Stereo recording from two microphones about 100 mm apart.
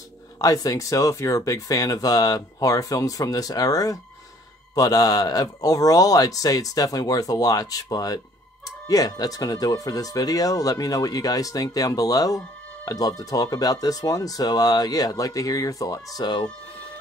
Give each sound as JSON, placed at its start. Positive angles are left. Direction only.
{"t": 0.4, "sound": "speech", "side_deg": 35}